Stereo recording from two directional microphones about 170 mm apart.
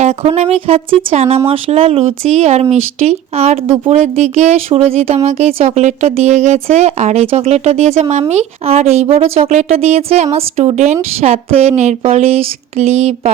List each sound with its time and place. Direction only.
0.0 s speech: 40° right (ahead or behind)